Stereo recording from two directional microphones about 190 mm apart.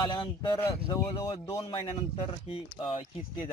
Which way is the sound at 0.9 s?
20° left (ahead or behind).